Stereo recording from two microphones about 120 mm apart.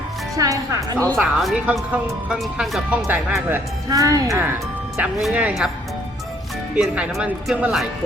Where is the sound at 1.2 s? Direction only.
Centre (ahead or behind).